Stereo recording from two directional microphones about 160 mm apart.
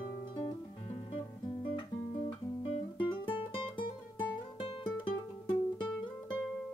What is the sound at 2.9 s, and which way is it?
Music, 35° left (ahead or behind).